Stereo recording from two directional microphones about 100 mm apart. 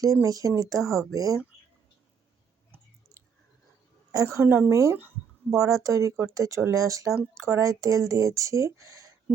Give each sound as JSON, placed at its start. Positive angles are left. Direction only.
{"t": 0.0, "sound": "speech", "side_deg": -35}
{"t": 4.1, "sound": "a woman's voice", "side_deg": -30}